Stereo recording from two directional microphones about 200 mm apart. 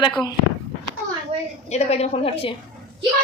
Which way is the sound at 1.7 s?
30° left (ahead or behind).